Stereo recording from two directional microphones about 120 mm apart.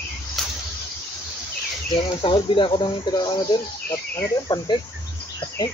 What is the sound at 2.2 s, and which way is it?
Speech, 45° left (ahead or behind).